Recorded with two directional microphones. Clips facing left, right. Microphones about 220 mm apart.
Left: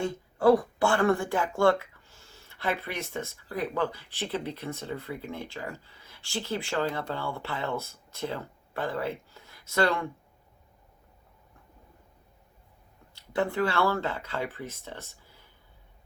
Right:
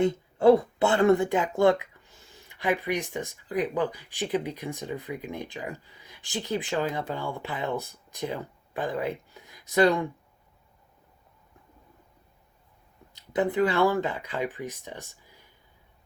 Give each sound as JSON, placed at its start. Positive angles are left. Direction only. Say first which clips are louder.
{"t": 0.0, "sound": "speech", "louder": "right 3 dB", "side_deg": -20}
{"t": 13.1, "sound": "speech", "louder": "right 3 dB", "side_deg": -20}